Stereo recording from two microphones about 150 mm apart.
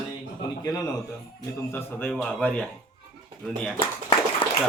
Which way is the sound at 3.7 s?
35° left (ahead or behind).